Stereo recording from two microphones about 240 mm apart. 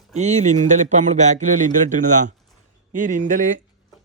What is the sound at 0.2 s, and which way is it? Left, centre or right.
Speech, right.